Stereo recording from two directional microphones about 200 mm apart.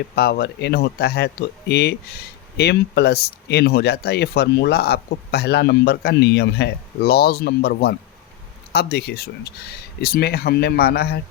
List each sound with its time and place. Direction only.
0.2 s speech: 55° left (ahead or behind)